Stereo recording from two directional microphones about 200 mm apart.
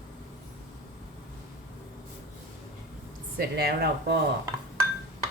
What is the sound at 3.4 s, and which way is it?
Speech, 55° right (ahead or behind).